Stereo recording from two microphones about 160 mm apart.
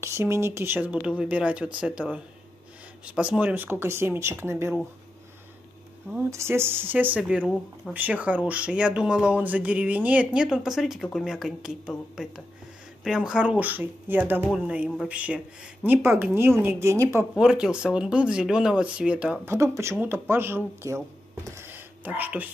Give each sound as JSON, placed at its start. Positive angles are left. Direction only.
{"t": 0.0, "sound": "speech", "side_deg": -15}
{"t": 6.3, "sound": "speech", "side_deg": -15}
{"t": 13.0, "sound": "speech", "side_deg": -5}
{"t": 17.4, "sound": "speech", "side_deg": -5}
{"t": 19.5, "sound": "speech", "side_deg": -15}